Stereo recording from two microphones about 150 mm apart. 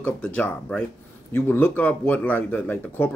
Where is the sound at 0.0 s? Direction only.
10° left (ahead or behind).